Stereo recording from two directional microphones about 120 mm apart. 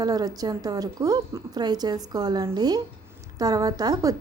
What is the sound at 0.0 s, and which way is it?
A woman's voice, 35° right (ahead or behind).